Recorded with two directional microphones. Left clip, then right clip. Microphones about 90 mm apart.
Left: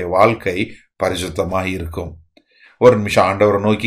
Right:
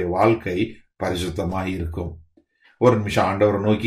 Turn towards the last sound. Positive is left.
turn(degrees=20)  # may be behind; listen again after turning